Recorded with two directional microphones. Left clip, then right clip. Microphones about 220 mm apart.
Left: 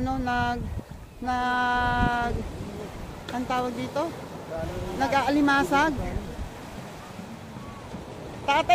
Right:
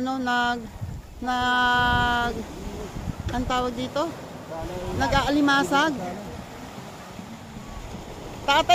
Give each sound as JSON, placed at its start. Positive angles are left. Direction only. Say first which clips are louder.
{"t": 0.0, "sound": "female singing", "louder": "right 3 dB", "side_deg": -15}
{"t": 3.4, "sound": "female singing", "louder": "right 2 dB", "side_deg": -15}
{"t": 8.5, "sound": "female singing", "louder": "right 2 dB", "side_deg": -20}